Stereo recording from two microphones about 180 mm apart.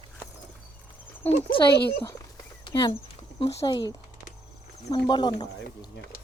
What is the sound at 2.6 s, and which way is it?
Speech, 25° left (ahead or behind).